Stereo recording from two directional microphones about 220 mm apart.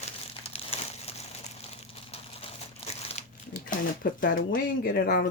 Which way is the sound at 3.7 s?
40° left (ahead or behind).